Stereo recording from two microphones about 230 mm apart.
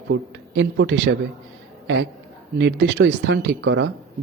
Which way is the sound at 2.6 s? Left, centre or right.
Right.